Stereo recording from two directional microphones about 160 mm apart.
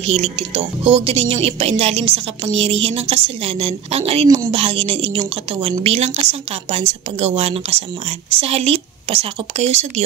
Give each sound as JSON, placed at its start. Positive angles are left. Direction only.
{"t": 0.0, "sound": "a woman's voice", "side_deg": -40}